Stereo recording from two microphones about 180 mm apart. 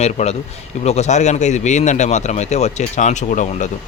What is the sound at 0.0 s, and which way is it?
Speech, 35° left (ahead or behind).